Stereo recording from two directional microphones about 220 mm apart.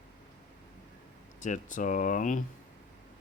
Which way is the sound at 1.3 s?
35° left (ahead or behind).